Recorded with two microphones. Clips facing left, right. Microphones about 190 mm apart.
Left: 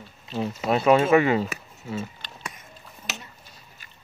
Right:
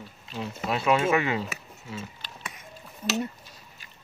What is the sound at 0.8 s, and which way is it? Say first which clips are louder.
Speech: left 6 dB; 40° left (ahead or behind).